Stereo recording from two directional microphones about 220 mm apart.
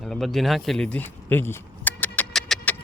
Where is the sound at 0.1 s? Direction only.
Centre (ahead or behind).